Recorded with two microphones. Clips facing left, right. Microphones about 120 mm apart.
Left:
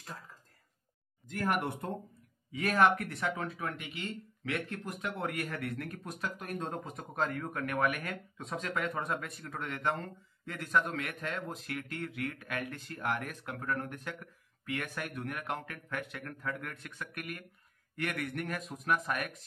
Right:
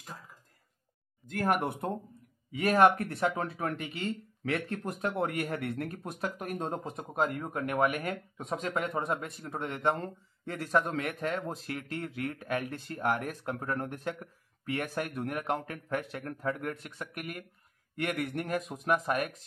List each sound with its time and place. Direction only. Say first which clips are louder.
2.7 s speech: right 4 dB; 35° right (ahead or behind)
13.1 s a man's voice: right 3 dB; 40° right (ahead or behind)
13.5 s a man's voice: right 2 dB; 25° right (ahead or behind)